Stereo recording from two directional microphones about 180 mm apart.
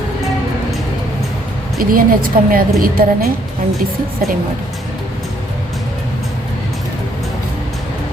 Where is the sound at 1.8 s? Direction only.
50° right (ahead or behind).